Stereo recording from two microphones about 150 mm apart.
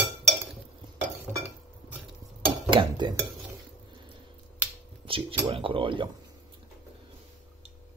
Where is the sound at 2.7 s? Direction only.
30° right (ahead or behind).